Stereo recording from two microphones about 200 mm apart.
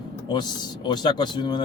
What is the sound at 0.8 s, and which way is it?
Speech, 20° left (ahead or behind).